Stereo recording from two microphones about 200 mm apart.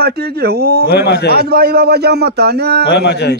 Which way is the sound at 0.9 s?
55° left (ahead or behind).